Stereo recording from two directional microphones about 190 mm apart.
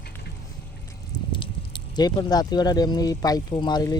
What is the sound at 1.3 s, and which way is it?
Speech, 25° left (ahead or behind).